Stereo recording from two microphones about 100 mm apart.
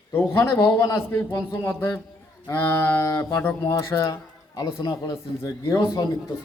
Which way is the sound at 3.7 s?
40° left (ahead or behind).